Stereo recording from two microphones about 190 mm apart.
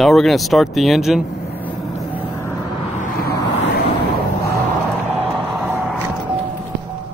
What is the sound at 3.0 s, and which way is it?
Vehicle, 55° left (ahead or behind).